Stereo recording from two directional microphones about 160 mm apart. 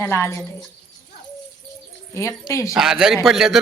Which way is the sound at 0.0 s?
15° left (ahead or behind).